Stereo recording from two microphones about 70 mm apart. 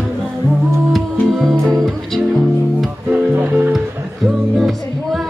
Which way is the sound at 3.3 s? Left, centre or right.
Right.